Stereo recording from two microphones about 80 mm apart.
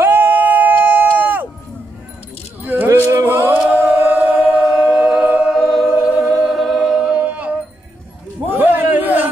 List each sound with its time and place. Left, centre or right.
0.0 s music: right
1.1 s run: right
2.6 s keys jangling: right
3.3 s chant: right; by 6.0 s centre
6.0 s choir: centre
6.4 s a capella: centre
8.5 s a sound: right